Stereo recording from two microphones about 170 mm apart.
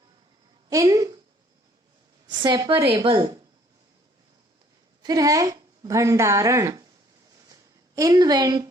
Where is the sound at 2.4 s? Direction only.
25° right (ahead or behind).